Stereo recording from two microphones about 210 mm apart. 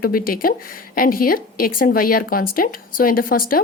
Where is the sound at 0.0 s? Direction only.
45° left (ahead or behind).